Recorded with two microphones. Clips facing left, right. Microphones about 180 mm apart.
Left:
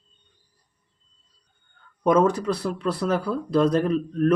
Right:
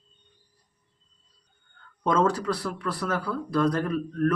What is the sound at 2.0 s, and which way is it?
Speech, 15° left (ahead or behind).